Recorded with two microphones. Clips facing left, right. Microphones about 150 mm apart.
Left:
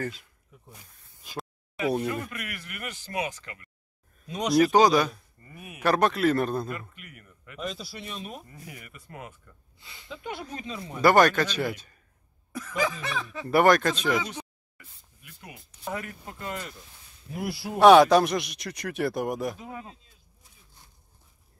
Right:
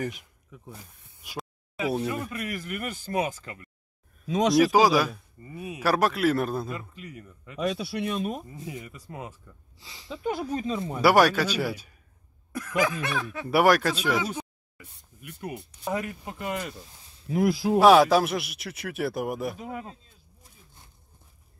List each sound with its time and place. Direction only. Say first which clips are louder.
0.0 s a man's voice: right 1 dB; 20° right (ahead or behind)
1.2 s speech: even; 10° right (ahead or behind)
2.3 s speech: right 6 dB; 35° right (ahead or behind)
4.7 s speech: left 1 dB; 5° right (ahead or behind)
5.5 s a man's voice: right 8 dB; 25° right (ahead or behind)
5.8 s speech: left 1 dB; 5° right (ahead or behind)
7.0 s a man's voice: right 8 dB; 25° right (ahead or behind)
7.6 s speech: right 8 dB; 70° right (ahead or behind); by 8.5 s 45° right (ahead or behind)
8.5 s a man's voice: right 7 dB; 20° right (ahead or behind)
10.0 s speech: right 7 dB; 40° right (ahead or behind)
11.0 s speech: left 1 dB; 10° right (ahead or behind)
15.8 s speech: right 4 dB; 20° right (ahead or behind)
17.3 s speech: right 10 dB; 90° right
17.7 s speech: left 2 dB; centre (ahead or behind)